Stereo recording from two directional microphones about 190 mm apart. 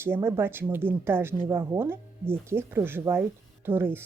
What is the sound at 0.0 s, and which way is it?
Speech, 10° right (ahead or behind).